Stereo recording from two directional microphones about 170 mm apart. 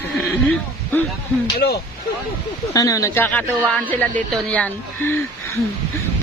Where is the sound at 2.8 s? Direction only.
20° left (ahead or behind).